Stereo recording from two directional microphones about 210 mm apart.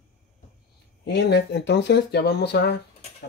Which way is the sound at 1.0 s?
55° left (ahead or behind).